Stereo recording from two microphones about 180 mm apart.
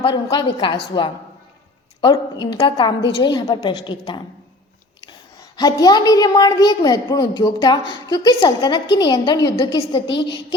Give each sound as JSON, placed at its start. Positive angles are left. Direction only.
{"t": 0.0, "sound": "a woman's voice", "side_deg": 25}
{"t": 5.4, "sound": "a woman's voice", "side_deg": 20}
{"t": 10.1, "sound": "a woman's voice", "side_deg": 80}